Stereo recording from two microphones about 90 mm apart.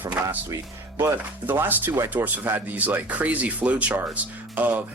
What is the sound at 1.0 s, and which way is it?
Speech, 25° right (ahead or behind).